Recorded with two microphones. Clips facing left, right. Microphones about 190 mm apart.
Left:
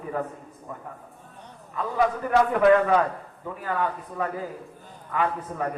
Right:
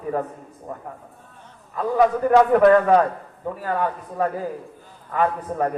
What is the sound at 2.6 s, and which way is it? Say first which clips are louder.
A man's voice: right 4 dB; 40° right (ahead or behind).